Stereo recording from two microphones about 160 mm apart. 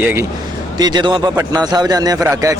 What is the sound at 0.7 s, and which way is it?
A man's voice, 25° right (ahead or behind).